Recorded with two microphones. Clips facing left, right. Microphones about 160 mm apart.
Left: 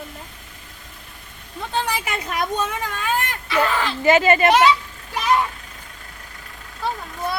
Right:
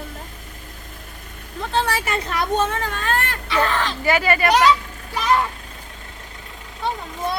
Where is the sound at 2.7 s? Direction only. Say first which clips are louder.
Right 1 dB; 10° left (ahead or behind).